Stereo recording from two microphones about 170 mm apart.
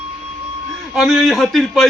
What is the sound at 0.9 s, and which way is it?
Speech, 5° right (ahead or behind).